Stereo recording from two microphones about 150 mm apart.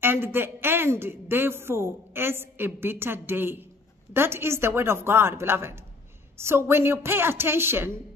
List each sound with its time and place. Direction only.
0.0 s a woman's voice: 15° right (ahead or behind)